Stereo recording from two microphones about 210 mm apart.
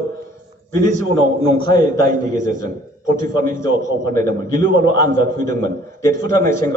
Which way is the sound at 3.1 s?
40° right (ahead or behind).